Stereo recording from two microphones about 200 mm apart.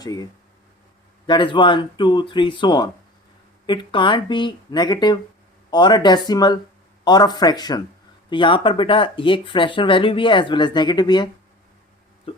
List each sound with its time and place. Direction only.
0.0 s speech: 20° left (ahead or behind)
1.3 s speech: 25° left (ahead or behind)